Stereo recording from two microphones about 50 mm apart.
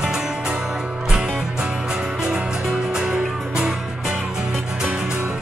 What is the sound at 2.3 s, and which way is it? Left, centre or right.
Music, centre.